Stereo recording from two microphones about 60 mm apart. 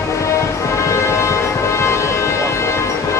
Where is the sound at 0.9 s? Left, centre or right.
Left.